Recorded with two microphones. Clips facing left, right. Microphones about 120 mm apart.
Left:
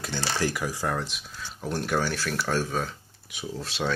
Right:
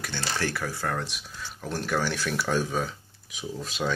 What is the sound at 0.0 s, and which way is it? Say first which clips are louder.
Speech: left 2 dB; 15° left (ahead or behind).